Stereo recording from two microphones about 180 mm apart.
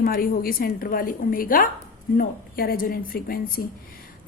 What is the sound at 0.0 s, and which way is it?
A woman's voice, 55° left (ahead or behind).